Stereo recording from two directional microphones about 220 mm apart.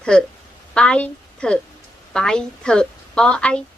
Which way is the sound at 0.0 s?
5° left (ahead or behind).